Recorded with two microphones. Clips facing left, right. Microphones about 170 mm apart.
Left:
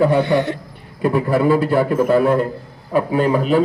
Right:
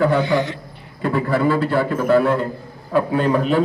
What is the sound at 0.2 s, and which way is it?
Speech, 60° left (ahead or behind).